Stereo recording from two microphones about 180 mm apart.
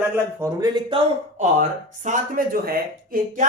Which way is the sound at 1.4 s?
40° right (ahead or behind).